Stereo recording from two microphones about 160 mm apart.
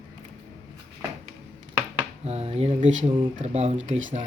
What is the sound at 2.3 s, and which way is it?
Speech, 40° right (ahead or behind).